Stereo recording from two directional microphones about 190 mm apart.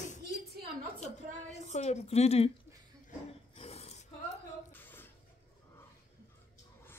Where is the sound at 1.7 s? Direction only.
35° left (ahead or behind).